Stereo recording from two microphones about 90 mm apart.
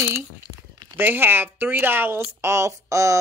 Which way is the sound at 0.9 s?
25° right (ahead or behind).